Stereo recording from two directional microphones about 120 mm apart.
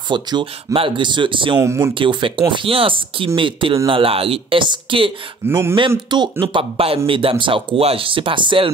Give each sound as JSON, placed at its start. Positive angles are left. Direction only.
{"t": 0.1, "sound": "speech", "side_deg": -40}
{"t": 1.6, "sound": "speech", "side_deg": -25}
{"t": 2.0, "sound": "speech", "side_deg": -45}
{"t": 5.5, "sound": "speech", "side_deg": -20}
{"t": 5.8, "sound": "speech", "side_deg": -40}